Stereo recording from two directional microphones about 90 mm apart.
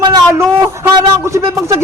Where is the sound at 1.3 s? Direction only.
35° right (ahead or behind).